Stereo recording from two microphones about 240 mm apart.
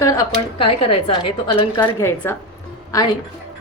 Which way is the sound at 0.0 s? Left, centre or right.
Centre.